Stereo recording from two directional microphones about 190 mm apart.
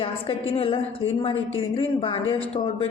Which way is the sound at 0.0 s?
30° left (ahead or behind).